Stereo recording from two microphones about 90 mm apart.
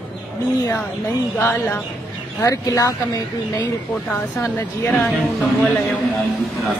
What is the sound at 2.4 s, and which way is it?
Speech, 35° left (ahead or behind).